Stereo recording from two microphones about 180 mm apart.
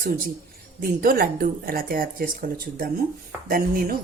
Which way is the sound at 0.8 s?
55° right (ahead or behind).